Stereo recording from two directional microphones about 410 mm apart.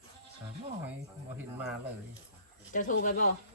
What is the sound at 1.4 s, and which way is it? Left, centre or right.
Speech, centre.